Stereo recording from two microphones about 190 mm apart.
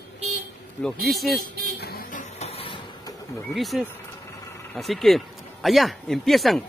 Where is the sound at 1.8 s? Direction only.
55° left (ahead or behind).